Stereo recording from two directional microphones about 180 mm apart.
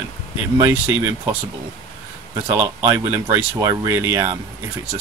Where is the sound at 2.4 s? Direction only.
15° right (ahead or behind).